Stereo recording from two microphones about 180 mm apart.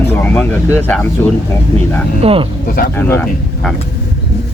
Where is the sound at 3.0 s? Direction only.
15° left (ahead or behind).